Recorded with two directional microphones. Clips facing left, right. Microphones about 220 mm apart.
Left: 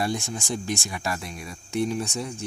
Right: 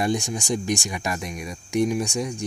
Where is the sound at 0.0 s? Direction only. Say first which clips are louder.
Right 4 dB; 15° right (ahead or behind).